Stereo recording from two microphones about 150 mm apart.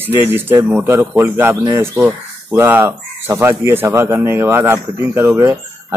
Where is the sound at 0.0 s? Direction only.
15° right (ahead or behind).